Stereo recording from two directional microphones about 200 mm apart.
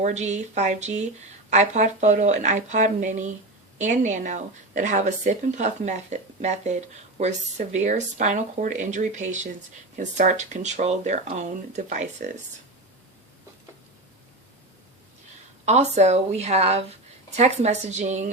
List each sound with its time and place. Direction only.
0.0 s a woman's voice: 35° right (ahead or behind)
15.6 s a woman's voice: 35° right (ahead or behind)